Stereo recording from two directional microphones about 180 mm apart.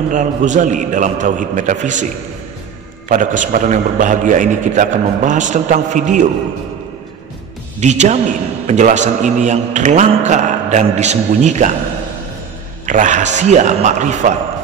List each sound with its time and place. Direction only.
0.1 s a man's voice: 45° right (ahead or behind)
3.1 s a man's voice: 45° right (ahead or behind)
7.8 s a man's voice: 40° right (ahead or behind)
12.8 s a man's voice: 45° right (ahead or behind)